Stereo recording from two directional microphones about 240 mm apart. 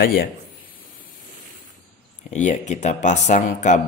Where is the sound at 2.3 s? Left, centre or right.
Left.